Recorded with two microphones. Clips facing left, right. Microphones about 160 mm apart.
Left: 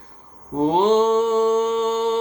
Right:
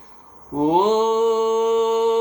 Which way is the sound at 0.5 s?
15° right (ahead or behind).